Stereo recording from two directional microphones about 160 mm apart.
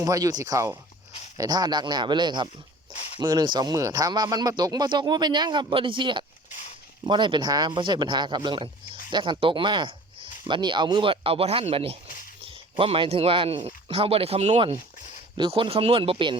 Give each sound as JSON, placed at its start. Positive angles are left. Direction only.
{"t": 0.0, "sound": "speech", "side_deg": -20}
{"t": 2.9, "sound": "a sound", "side_deg": 40}
{"t": 3.2, "sound": "speech", "side_deg": -25}
{"t": 15.4, "sound": "speech", "side_deg": -35}